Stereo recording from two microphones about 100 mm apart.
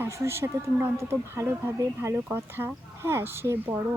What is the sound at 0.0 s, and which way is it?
Speech, 25° right (ahead or behind).